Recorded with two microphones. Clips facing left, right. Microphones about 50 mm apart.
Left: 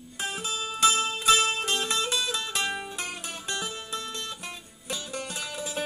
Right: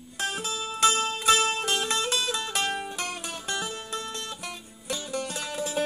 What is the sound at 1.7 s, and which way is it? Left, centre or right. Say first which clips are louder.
Music: right 1 dB; centre.